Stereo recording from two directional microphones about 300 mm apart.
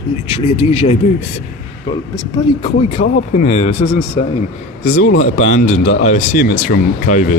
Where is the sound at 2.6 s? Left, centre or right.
Left.